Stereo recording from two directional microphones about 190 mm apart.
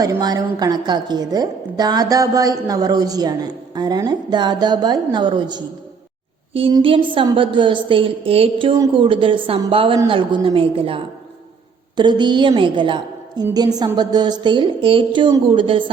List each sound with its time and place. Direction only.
0.0 s a woman's voice: 20° right (ahead or behind)